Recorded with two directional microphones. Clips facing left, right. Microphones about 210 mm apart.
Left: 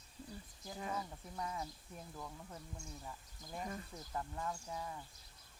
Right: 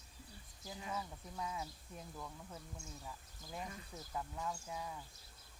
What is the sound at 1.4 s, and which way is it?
Speech, 5° right (ahead or behind).